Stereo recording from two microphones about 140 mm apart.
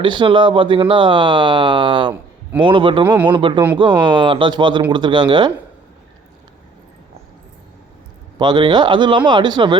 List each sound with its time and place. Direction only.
0.0 s speech: 35° right (ahead or behind)
8.4 s speech: 30° right (ahead or behind)